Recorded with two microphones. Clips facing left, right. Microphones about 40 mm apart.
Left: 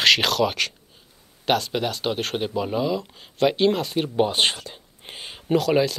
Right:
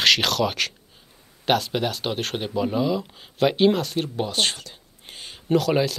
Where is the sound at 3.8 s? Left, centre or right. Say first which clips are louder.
Left 2 dB; centre.